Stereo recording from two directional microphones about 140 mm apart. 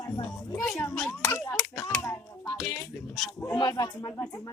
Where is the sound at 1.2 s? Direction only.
20° left (ahead or behind).